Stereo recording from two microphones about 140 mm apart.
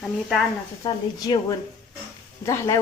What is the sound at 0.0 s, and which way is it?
Speech, centre (ahead or behind).